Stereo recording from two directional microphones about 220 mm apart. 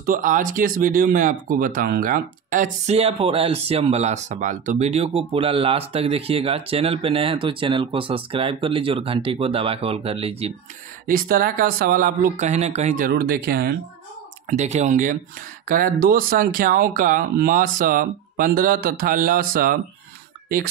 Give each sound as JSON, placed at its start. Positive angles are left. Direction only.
{"t": 0.0, "sound": "speech", "side_deg": -40}
{"t": 11.1, "sound": "speech", "side_deg": -40}
{"t": 14.5, "sound": "speech", "side_deg": -30}